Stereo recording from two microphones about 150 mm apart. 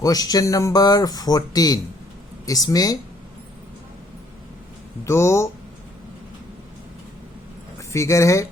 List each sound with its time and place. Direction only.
0.0 s speech: 25° left (ahead or behind)
5.0 s speech: 20° left (ahead or behind)
7.8 s speech: 20° left (ahead or behind)